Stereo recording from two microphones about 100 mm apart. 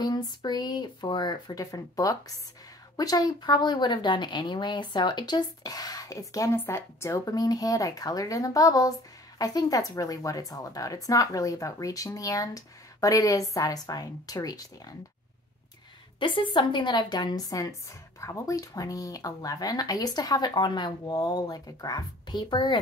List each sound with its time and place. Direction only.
0.0 s speech: 40° left (ahead or behind)
16.2 s speech: 50° left (ahead or behind)